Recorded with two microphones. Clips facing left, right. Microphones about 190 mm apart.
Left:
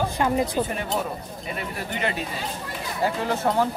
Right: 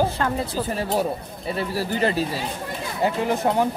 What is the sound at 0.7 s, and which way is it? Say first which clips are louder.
Speech: right 4 dB; 35° right (ahead or behind).